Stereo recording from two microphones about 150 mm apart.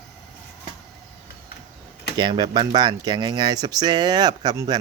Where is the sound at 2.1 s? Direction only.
30° right (ahead or behind).